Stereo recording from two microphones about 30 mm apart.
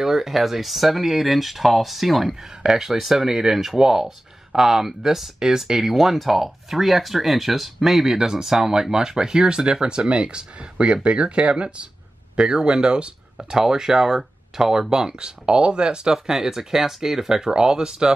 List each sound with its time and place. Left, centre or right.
0.0 s speech: centre
2.4 s speech: centre
7.8 s speech: centre; by 11.9 s right
12.4 s speech: right
16.1 s speech: centre
17.6 s speech: right